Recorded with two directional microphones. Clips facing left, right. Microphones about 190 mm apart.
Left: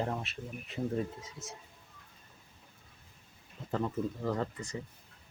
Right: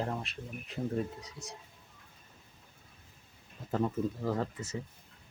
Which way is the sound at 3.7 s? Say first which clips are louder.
Right 2 dB; 5° right (ahead or behind).